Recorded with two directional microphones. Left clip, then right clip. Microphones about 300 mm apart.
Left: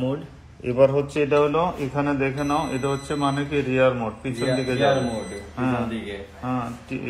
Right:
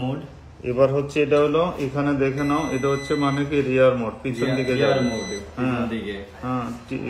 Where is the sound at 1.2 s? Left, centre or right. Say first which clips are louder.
Right 1 dB; centre.